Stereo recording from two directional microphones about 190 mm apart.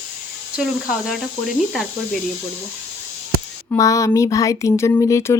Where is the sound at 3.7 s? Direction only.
15° left (ahead or behind).